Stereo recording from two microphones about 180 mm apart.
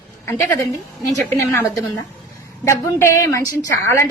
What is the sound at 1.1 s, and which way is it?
A woman's voice, 15° left (ahead or behind).